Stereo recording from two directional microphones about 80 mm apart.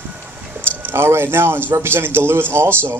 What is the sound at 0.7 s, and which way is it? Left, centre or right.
A man's voice, right.